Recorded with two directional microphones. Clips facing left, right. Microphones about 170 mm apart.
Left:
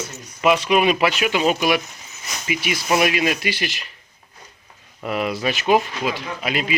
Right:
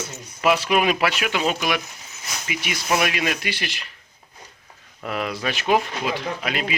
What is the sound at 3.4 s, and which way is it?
Speech, 5° left (ahead or behind).